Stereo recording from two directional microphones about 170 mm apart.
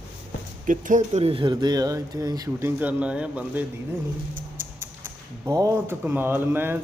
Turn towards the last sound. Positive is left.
turn(degrees=-10)  # may be behind; listen again after turning